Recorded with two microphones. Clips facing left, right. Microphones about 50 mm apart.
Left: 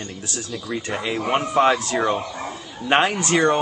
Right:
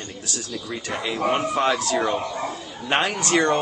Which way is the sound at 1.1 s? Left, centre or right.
Centre.